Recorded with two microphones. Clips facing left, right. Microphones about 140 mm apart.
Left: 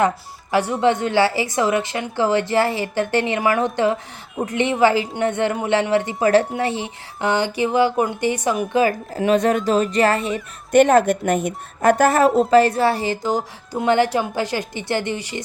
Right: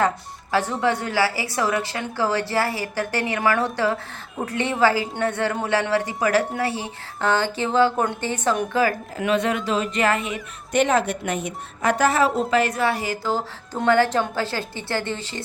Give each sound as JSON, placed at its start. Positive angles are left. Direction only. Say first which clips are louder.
{"t": 0.5, "sound": "a woman's voice", "louder": "left 4 dB", "side_deg": 15}
{"t": 9.1, "sound": "speech", "louder": "left 7 dB", "side_deg": 35}
{"t": 10.7, "sound": "speech", "louder": "left 7 dB", "side_deg": 50}
{"t": 12.5, "sound": "speech", "louder": "left 6 dB", "side_deg": 35}
{"t": 13.8, "sound": "a woman's voice", "louder": "left 1 dB", "side_deg": 20}